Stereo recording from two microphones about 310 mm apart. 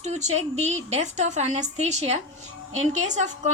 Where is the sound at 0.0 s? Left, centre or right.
Right.